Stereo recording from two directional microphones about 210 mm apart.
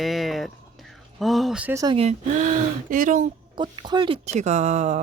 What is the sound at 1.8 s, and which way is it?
Speech, 25° right (ahead or behind).